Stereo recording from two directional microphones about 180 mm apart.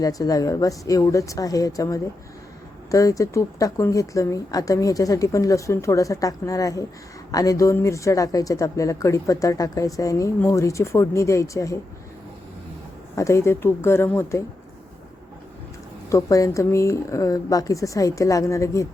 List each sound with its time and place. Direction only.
0.0 s speech: 20° left (ahead or behind)
13.1 s speech: 15° left (ahead or behind)
16.0 s speech: 15° left (ahead or behind)